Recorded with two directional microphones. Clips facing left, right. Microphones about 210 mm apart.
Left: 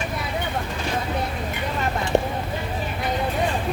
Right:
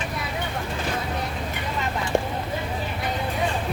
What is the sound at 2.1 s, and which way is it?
Vehicle, 20° left (ahead or behind).